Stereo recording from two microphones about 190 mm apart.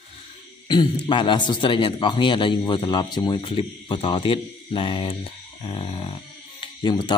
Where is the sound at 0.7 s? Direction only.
25° left (ahead or behind).